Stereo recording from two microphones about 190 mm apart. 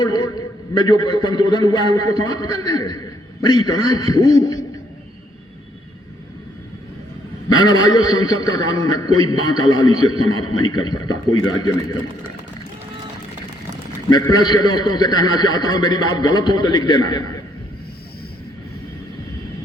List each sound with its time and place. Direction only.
0.0 s a man's voice: 20° left (ahead or behind)
7.6 s a man's voice: 20° left (ahead or behind)
14.1 s a man's voice: 20° left (ahead or behind)